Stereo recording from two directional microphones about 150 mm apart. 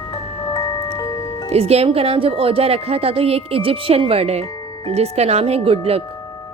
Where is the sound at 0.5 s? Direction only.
25° left (ahead or behind).